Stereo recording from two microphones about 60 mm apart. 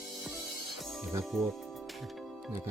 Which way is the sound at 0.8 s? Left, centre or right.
Centre.